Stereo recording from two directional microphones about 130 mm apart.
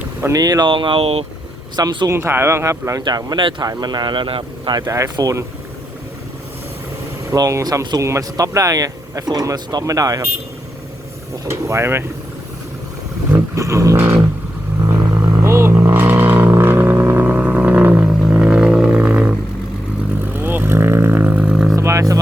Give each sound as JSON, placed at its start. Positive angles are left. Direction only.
{"t": 0.0, "sound": "speech", "side_deg": -20}
{"t": 1.7, "sound": "speech", "side_deg": -35}
{"t": 2.0, "sound": "speech", "side_deg": -20}
{"t": 4.9, "sound": "speech", "side_deg": -25}
{"t": 7.3, "sound": "speech", "side_deg": -25}
{"t": 11.4, "sound": "speech", "side_deg": -20}
{"t": 13.6, "sound": "a sound", "side_deg": -25}
{"t": 14.8, "sound": "vehicle", "side_deg": -15}
{"t": 20.3, "sound": "vehicle", "side_deg": -15}
{"t": 21.8, "sound": "vehicle", "side_deg": -25}